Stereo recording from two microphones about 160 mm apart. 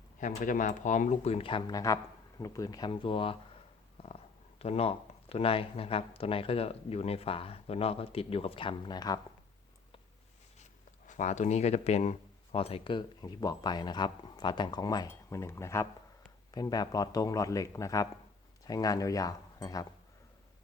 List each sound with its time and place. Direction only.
0.2 s speech: 55° left (ahead or behind); by 3.3 s 35° left (ahead or behind)
4.0 s a sound: 35° left (ahead or behind)
4.6 s speech: 40° left (ahead or behind); by 9.2 s 25° left (ahead or behind)
10.6 s speech: 50° left (ahead or behind); by 19.9 s 20° left (ahead or behind)